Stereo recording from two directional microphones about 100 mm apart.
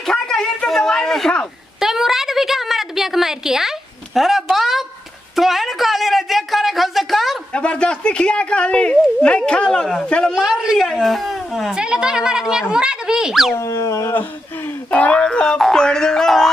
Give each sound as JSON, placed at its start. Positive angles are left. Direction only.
{"t": 0.0, "sound": "a sound", "side_deg": 5}
{"t": 7.5, "sound": "a woman's voice", "side_deg": 10}
{"t": 10.3, "sound": "speech", "side_deg": -5}
{"t": 13.6, "sound": "speech", "side_deg": 30}
{"t": 14.9, "sound": "a woman's voice", "side_deg": 10}